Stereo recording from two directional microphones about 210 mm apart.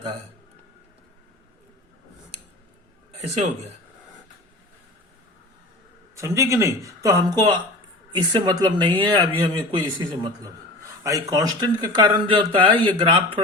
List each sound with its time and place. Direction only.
6.1 s speech: 15° right (ahead or behind)